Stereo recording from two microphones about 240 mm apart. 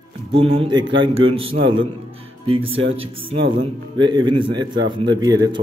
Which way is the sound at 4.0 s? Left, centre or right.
Centre.